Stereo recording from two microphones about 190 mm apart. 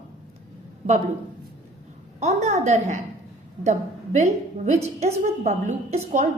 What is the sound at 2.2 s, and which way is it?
Speech, 35° right (ahead or behind).